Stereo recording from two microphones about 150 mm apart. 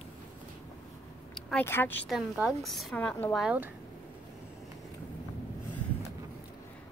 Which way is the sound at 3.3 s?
5° right (ahead or behind).